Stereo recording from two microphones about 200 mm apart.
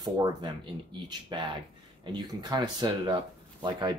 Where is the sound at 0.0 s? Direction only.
20° right (ahead or behind).